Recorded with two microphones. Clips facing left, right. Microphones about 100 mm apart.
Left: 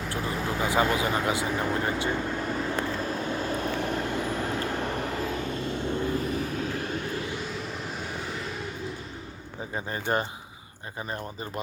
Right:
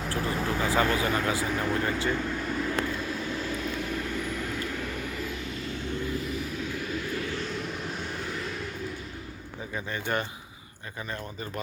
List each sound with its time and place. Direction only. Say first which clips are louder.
0.1 s vehicle: right 1 dB; 20° left (ahead or behind); by 5.7 s 40° left (ahead or behind)
5.7 s vehicle: left 4 dB; 25° left (ahead or behind)
6.0 s vehicle: left 3 dB; 40° left (ahead or behind)
7.5 s vehicle: right 1 dB; centre (ahead or behind)
9.7 s speech: left 2 dB; 35° left (ahead or behind)